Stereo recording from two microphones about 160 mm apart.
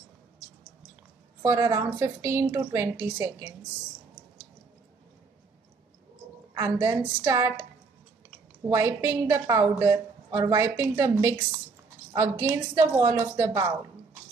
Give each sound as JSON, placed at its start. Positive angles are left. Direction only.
{"t": 1.4, "sound": "a woman's voice", "side_deg": -20}
{"t": 6.5, "sound": "a woman's voice", "side_deg": -20}
{"t": 8.6, "sound": "a woman's voice", "side_deg": -20}